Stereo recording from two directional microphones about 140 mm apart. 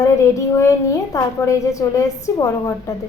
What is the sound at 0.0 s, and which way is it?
Child singing, 20° left (ahead or behind).